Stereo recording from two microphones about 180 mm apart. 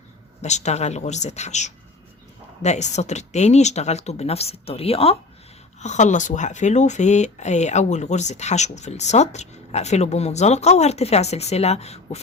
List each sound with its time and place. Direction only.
0.4 s speech: 40° left (ahead or behind)